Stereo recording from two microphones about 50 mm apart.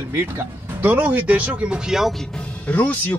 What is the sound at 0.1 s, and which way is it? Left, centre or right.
Speech, right.